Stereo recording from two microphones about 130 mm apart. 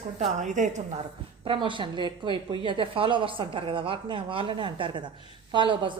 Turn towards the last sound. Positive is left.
turn(degrees=-40)  # may be behind; listen again after turning